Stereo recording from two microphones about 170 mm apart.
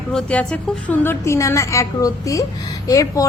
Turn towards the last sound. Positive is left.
turn(degrees=20)  # may be behind; listen again after turning